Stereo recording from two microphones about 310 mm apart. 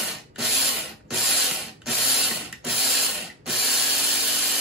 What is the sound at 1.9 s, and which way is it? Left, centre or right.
Printer, centre.